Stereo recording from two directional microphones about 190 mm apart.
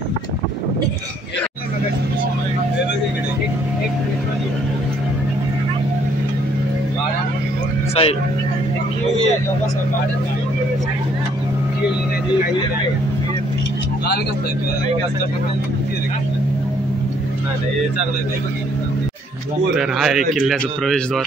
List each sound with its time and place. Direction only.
7.9 s speech: 30° left (ahead or behind)
19.8 s speech: centre (ahead or behind)